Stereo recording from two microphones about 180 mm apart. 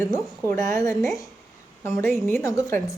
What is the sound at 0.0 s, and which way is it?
A woman's voice, 15° left (ahead or behind).